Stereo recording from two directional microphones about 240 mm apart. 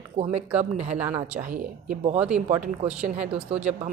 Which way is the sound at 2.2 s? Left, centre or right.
Centre.